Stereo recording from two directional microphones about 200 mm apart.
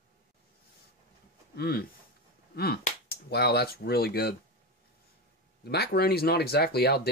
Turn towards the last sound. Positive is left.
turn(degrees=55)  # may be behind; listen again after turning